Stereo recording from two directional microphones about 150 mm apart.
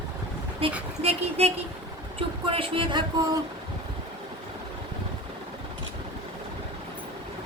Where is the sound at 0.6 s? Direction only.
40° right (ahead or behind).